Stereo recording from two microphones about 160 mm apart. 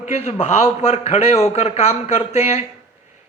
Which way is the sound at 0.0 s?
45° left (ahead or behind).